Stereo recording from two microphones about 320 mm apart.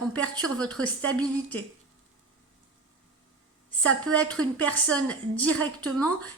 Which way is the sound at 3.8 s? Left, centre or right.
Centre.